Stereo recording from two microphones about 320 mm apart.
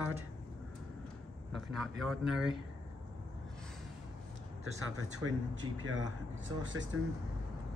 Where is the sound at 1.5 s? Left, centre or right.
Centre.